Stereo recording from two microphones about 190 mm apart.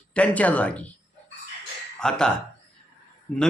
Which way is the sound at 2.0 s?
5° left (ahead or behind).